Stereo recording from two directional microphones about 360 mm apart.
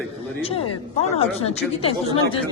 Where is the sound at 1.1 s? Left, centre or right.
Centre.